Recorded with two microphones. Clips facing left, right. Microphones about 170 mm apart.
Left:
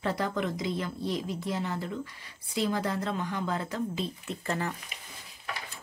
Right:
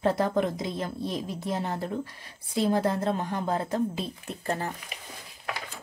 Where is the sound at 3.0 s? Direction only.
40° right (ahead or behind).